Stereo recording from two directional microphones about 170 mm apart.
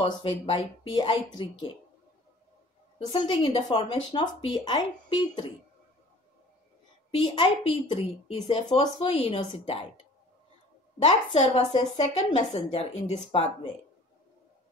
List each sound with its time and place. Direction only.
0.0 s a woman's voice: 30° left (ahead or behind)
3.1 s speech: 30° left (ahead or behind)
7.1 s a woman's voice: 30° left (ahead or behind)
11.1 s a woman's voice: 35° left (ahead or behind)
13.0 s a woman's voice: 30° left (ahead or behind)